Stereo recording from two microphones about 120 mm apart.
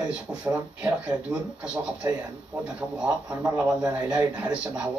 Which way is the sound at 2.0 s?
25° right (ahead or behind).